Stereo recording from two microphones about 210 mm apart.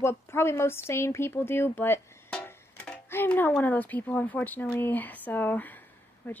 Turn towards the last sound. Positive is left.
turn(degrees=10)  # may be behind; listen again after turning